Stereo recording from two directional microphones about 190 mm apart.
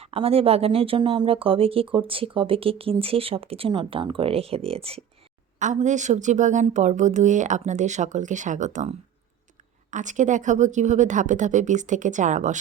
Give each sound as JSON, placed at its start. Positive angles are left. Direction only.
{"t": 0.0, "sound": "a woman's voice", "side_deg": -30}